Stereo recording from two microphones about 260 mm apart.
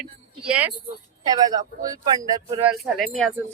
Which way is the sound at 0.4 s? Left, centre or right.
Centre.